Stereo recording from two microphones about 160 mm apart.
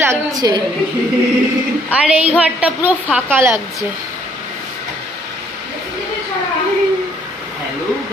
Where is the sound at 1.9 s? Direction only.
5° right (ahead or behind).